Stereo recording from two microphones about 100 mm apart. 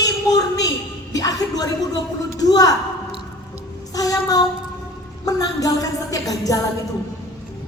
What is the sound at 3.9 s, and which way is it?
A woman's voice, 40° left (ahead or behind).